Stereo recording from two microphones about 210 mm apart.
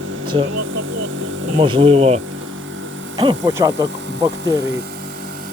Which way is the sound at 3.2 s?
20° right (ahead or behind).